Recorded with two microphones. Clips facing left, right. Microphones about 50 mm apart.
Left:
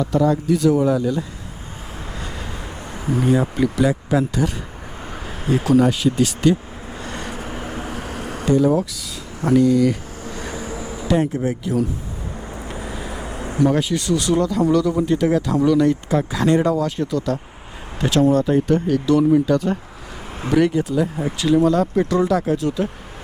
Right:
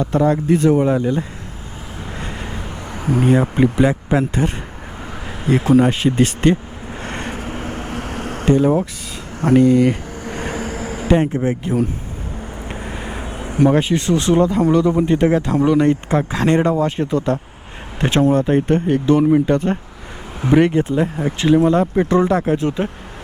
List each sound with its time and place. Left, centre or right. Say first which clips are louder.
0.0 s speech: right 2 dB; right
2.1 s vehicle: right 4 dB; right
3.4 s speech: right 3 dB; right
7.0 s a sound: right 3 dB; right
10.6 s a sound: right 4 dB; right
11.3 s speech: right 2 dB; right
12.4 s vehicle: right 2 dB; right
13.4 s speech: right 3 dB; right